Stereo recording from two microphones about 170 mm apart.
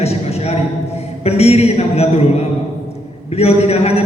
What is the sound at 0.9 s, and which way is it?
A man's voice, 35° left (ahead or behind).